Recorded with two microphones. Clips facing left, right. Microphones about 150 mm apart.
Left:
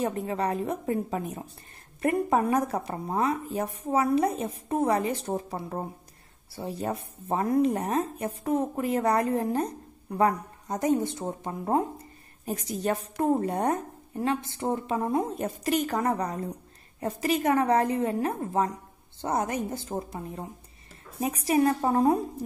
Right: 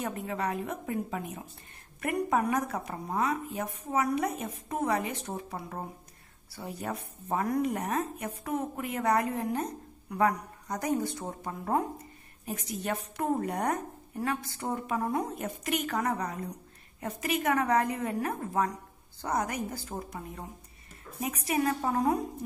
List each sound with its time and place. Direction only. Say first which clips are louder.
0.0 s a woman's voice: left 5 dB; 35° left (ahead or behind)
12.4 s a woman's voice: left 5 dB; 35° left (ahead or behind)